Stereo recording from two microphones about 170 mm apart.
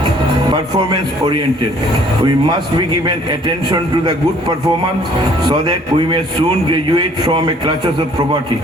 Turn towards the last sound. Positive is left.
turn(degrees=-25)  # may be behind; listen again after turning